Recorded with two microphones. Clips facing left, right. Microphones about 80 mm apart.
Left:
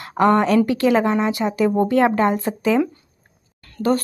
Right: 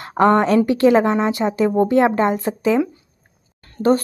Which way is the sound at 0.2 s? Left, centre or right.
Right.